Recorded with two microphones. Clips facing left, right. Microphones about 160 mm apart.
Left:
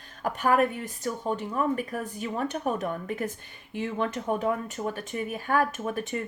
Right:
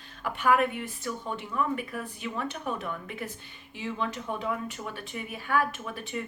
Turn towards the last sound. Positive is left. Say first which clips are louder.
# left 5 dB
turn(degrees=45)  # may be behind; listen again after turning